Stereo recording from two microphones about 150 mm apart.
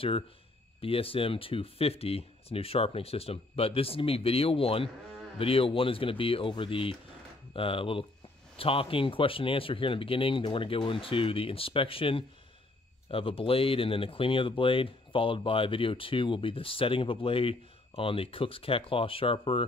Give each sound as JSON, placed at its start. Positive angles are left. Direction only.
{"t": 0.7, "sound": "speech", "side_deg": 40}